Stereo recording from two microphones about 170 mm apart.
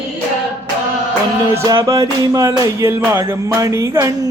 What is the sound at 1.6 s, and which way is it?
Music, 20° right (ahead or behind).